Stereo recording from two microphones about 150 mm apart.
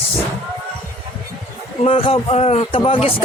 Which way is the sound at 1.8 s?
40° left (ahead or behind).